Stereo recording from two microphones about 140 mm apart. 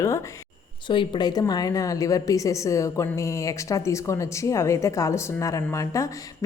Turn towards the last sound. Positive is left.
turn(degrees=20)  # may be behind; listen again after turning